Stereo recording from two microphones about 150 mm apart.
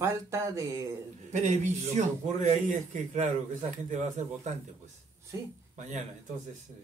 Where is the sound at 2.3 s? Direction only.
50° right (ahead or behind).